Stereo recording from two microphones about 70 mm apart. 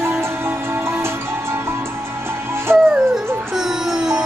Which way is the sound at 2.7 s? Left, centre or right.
Right.